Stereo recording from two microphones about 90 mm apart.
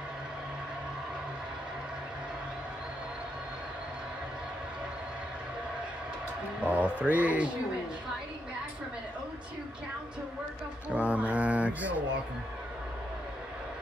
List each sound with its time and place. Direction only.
6.6 s mantra: 15° right (ahead or behind)
11.0 s mantra: 15° right (ahead or behind)